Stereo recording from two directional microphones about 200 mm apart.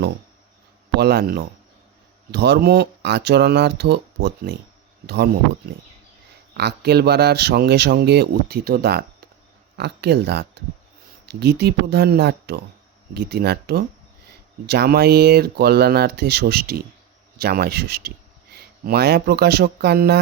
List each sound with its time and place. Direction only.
0.9 s a man's voice: 55° right (ahead or behind)
6.6 s a man's voice: 55° right (ahead or behind)